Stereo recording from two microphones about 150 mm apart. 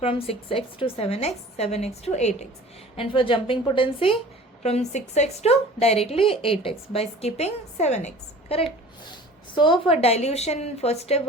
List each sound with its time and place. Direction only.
0.0 s a woman's voice: 40° left (ahead or behind)
2.9 s a woman's voice: 35° left (ahead or behind)
4.6 s a woman's voice: 45° left (ahead or behind)